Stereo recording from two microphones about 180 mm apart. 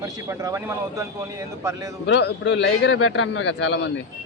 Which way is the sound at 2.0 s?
75° left (ahead or behind).